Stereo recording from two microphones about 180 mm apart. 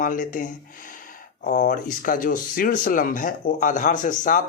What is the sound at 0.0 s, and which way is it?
Speech, 45° left (ahead or behind).